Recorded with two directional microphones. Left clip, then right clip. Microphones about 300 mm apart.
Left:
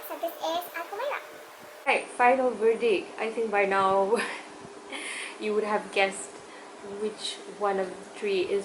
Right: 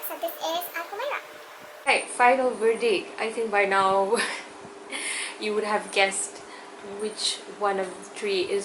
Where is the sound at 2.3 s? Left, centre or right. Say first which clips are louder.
Right 1 dB; centre.